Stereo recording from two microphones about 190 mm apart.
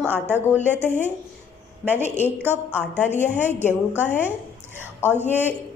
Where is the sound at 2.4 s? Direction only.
10° right (ahead or behind).